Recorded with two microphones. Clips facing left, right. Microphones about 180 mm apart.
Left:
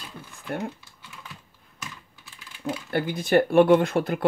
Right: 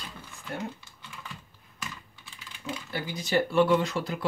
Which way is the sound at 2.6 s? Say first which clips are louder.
Left 8 dB; 55° left (ahead or behind).